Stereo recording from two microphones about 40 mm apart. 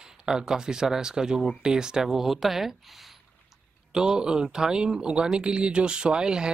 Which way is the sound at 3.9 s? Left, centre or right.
Centre.